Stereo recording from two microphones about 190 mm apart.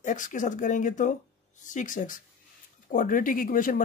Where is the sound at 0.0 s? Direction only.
40° left (ahead or behind).